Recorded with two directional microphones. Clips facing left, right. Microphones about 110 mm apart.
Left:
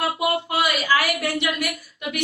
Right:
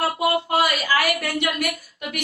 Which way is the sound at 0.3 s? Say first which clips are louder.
Right 4 dB; 35° right (ahead or behind).